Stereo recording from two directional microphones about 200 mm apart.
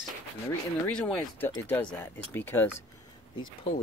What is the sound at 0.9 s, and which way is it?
Speech, 5° left (ahead or behind).